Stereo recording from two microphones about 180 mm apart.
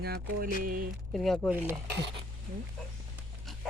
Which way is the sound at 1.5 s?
10° right (ahead or behind).